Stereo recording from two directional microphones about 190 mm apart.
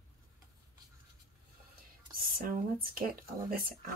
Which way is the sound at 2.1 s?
50° right (ahead or behind).